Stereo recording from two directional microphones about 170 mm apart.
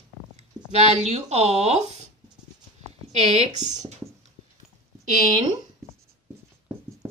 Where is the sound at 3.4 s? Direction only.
45° right (ahead or behind).